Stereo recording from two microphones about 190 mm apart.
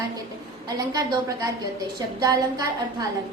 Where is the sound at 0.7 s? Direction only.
20° right (ahead or behind).